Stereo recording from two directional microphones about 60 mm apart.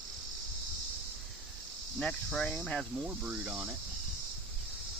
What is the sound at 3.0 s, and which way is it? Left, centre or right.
Cricket, right.